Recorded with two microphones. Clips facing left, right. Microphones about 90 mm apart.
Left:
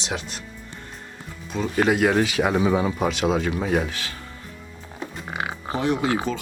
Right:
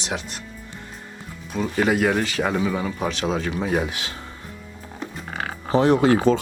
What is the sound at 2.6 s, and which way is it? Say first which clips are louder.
Speech: left 4 dB; 20° left (ahead or behind).